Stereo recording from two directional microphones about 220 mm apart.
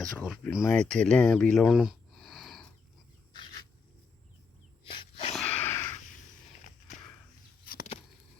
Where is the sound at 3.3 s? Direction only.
20° left (ahead or behind).